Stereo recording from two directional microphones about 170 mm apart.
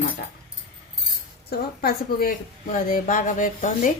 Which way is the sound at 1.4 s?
65° left (ahead or behind).